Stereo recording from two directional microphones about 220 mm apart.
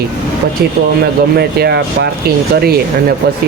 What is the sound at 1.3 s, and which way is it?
Speech, 45° right (ahead or behind).